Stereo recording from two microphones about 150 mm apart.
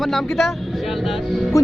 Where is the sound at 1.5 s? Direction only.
20° left (ahead or behind).